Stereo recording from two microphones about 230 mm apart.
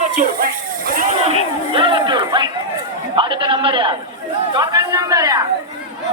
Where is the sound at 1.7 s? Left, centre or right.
Right.